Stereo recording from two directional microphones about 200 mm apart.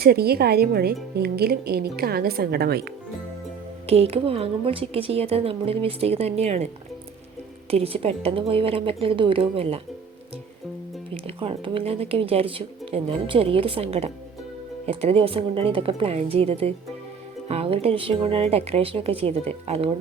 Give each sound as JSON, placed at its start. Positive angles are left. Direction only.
{"t": 0.0, "sound": "speech", "side_deg": -50}
{"t": 3.8, "sound": "speech", "side_deg": -30}
{"t": 7.7, "sound": "speech", "side_deg": -30}
{"t": 11.1, "sound": "speech", "side_deg": -30}